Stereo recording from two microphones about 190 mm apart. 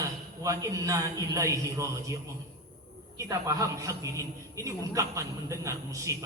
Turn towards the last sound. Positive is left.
turn(degrees=-15)  # may be behind; listen again after turning